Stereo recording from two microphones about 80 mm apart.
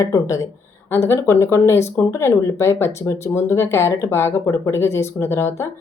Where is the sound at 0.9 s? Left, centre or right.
Left.